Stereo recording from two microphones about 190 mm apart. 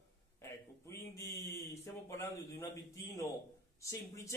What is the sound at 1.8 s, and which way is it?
A man's voice, 15° left (ahead or behind).